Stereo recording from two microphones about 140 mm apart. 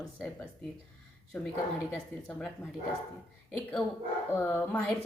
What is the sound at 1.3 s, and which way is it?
Speech, 5° left (ahead or behind).